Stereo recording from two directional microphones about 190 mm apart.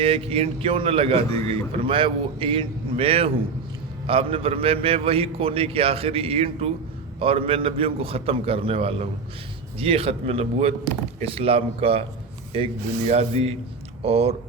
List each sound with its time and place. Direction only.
0.0 s a man's voice: 30° right (ahead or behind)